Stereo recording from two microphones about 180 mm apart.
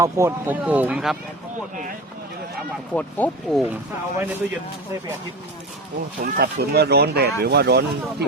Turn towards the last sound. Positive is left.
turn(degrees=-65)  # may be behind; listen again after turning